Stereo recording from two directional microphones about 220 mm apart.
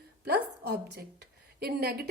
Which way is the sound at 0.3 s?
45° right (ahead or behind).